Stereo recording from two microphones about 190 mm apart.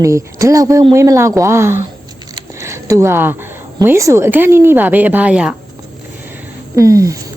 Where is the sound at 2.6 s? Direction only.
15° right (ahead or behind).